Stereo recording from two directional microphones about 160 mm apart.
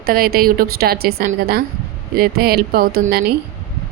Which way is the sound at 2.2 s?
70° right (ahead or behind).